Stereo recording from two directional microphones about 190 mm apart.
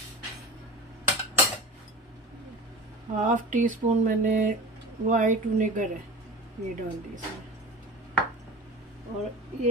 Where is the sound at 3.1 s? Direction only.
40° right (ahead or behind).